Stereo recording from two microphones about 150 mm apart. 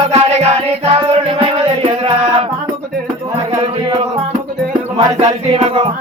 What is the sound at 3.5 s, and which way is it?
Music, 40° right (ahead or behind).